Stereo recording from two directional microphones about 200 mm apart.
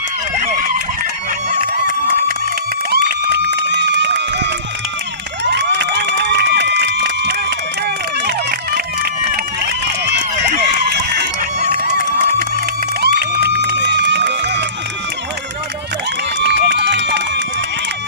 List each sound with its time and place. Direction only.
2.9 s run: 55° right (ahead or behind)
5.5 s cheering: 60° right (ahead or behind)
7.9 s run: 55° right (ahead or behind)
13.0 s run: 55° right (ahead or behind)
16.4 s run: 60° right (ahead or behind)